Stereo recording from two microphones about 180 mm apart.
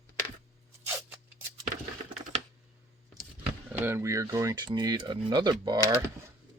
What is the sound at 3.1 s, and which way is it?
Speech, 10° right (ahead or behind).